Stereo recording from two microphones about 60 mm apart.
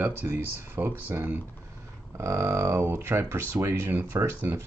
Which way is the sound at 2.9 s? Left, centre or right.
Right.